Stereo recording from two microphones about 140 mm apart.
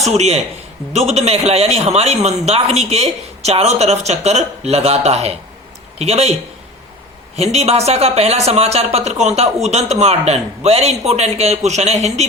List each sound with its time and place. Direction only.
0.0 s speech: 50° right (ahead or behind)
7.3 s speech: 50° right (ahead or behind)